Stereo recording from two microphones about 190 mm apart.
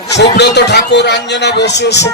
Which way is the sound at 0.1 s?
60° left (ahead or behind).